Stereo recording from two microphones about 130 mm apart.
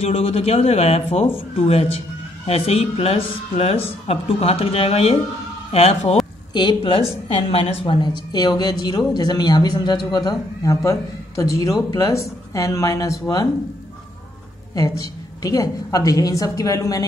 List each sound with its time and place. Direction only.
0.0 s speech: 50° left (ahead or behind)
6.5 s a woman's voice: 35° left (ahead or behind)
14.8 s a woman's voice: 30° left (ahead or behind)